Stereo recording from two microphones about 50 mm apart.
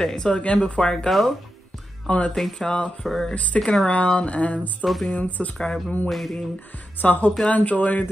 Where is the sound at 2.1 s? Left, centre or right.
Left.